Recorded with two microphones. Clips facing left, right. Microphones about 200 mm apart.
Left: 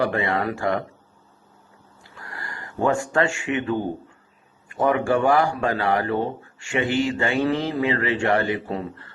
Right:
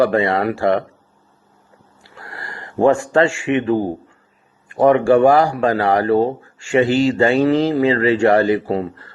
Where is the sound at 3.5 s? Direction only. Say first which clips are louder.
Right 7 dB; 90° right.